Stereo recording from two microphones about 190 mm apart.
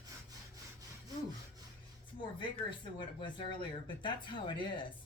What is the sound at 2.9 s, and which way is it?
Speech, 25° left (ahead or behind).